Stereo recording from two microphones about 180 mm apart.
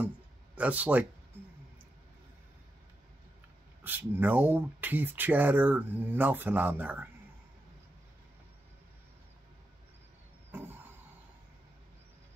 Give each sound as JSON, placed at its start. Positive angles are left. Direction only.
{"t": 0.6, "sound": "speech", "side_deg": -10}
{"t": 3.8, "sound": "speech", "side_deg": -10}
{"t": 10.5, "sound": "vehicle", "side_deg": -10}